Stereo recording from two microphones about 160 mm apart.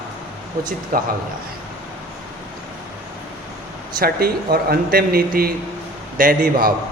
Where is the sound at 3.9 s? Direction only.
70° right (ahead or behind).